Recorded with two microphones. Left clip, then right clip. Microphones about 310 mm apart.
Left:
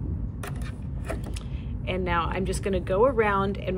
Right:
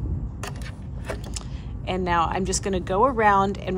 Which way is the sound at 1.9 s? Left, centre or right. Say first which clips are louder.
Right 4 dB; centre.